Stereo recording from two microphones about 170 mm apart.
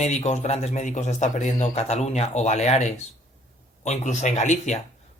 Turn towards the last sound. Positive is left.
turn(degrees=45)  # may be behind; listen again after turning